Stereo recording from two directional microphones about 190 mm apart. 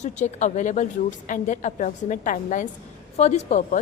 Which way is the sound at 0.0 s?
40° left (ahead or behind).